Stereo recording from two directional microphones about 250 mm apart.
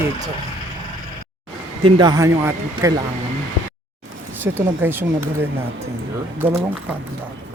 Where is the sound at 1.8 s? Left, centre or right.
Centre.